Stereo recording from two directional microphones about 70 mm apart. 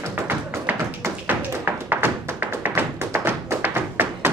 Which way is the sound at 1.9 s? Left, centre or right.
Right.